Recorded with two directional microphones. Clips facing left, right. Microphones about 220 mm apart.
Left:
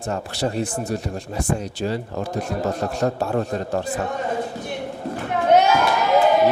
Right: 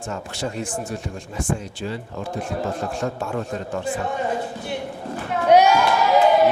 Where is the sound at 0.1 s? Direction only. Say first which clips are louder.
Left 5 dB; 35° left (ahead or behind).